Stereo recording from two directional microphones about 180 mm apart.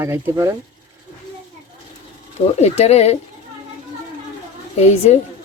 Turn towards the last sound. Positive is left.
turn(degrees=35)  # may be behind; listen again after turning